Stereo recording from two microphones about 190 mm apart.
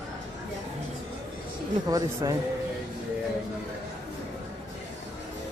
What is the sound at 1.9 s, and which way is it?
Speech, 20° right (ahead or behind).